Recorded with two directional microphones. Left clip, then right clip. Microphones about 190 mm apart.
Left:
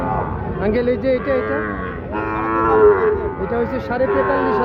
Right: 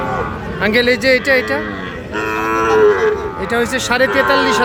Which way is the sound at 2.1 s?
20° left (ahead or behind).